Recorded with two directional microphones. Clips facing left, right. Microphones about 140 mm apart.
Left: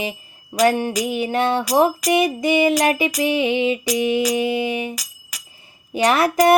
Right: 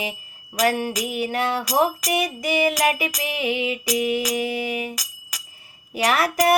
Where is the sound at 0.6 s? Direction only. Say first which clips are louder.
Left 4 dB; 25° left (ahead or behind).